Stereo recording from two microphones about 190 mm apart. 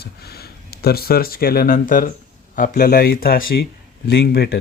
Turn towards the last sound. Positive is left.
turn(degrees=55)  # may be behind; listen again after turning